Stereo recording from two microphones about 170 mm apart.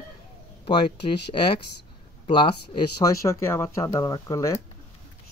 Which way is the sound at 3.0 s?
20° left (ahead or behind).